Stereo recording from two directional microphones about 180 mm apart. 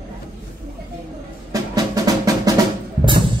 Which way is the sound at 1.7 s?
20° right (ahead or behind).